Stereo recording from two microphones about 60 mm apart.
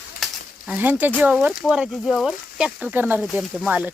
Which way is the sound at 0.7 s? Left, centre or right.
Right.